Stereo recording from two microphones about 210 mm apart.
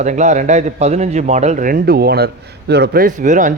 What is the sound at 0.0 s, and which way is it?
A man's voice, 35° right (ahead or behind).